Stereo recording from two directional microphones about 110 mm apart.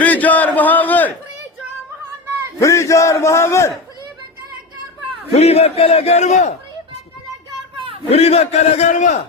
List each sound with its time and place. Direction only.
0.0 s a sound: 15° left (ahead or behind)
2.6 s a man's voice: 25° left (ahead or behind)
5.3 s a man's voice: 70° left (ahead or behind); by 6.6 s 90° left
8.1 s a man's voice: 70° left (ahead or behind); by 9.1 s 85° left